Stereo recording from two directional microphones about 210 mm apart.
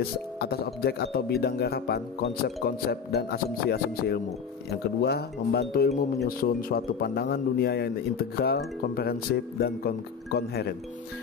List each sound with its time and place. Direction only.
0.4 s a man's voice: 50° left (ahead or behind)